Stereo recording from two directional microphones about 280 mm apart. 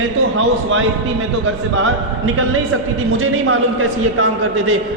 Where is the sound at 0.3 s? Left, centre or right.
Right.